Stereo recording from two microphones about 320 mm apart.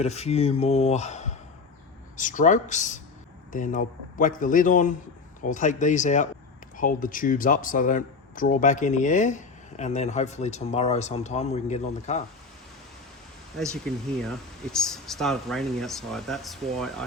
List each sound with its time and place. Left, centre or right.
0.0 s speech: centre
13.8 s speech: centre